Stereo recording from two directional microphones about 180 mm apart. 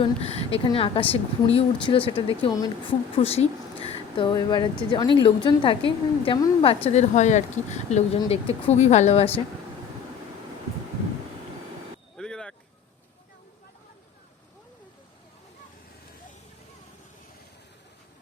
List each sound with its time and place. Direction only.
0.0 s a woman's voice: 35° left (ahead or behind); by 2.6 s 20° left (ahead or behind)
3.2 s a woman's voice: 35° left (ahead or behind)
6.8 s a woman's voice: 40° left (ahead or behind)
12.1 s vehicle: 5° left (ahead or behind)